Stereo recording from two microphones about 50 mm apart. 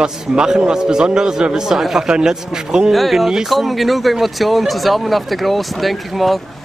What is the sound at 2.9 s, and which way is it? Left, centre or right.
Speech, centre.